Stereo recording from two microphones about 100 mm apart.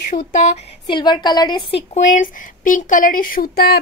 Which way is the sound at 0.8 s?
50° left (ahead or behind).